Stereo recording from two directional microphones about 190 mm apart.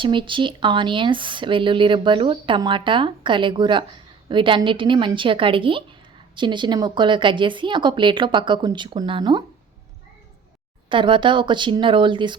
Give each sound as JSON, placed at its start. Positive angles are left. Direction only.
{"t": 0.0, "sound": "speech", "side_deg": -25}
{"t": 10.8, "sound": "speech", "side_deg": -25}